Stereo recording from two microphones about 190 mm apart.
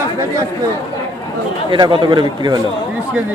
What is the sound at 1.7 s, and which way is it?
Speech, 25° right (ahead or behind).